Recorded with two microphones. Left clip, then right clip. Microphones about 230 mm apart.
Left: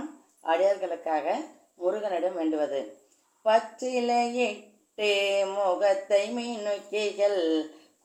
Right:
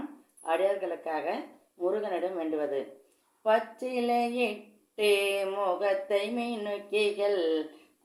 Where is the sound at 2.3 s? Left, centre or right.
Right.